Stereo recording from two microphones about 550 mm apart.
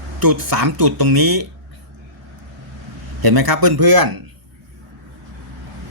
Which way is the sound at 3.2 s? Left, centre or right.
Right.